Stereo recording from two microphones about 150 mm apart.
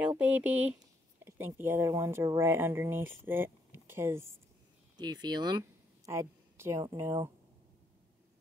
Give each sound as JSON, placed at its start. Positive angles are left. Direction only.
{"t": 0.2, "sound": "speech", "side_deg": -10}
{"t": 4.9, "sound": "a woman's voice", "side_deg": -30}